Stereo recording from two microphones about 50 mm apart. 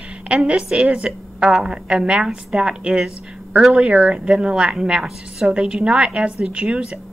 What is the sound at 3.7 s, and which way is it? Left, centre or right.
A woman's voice, right.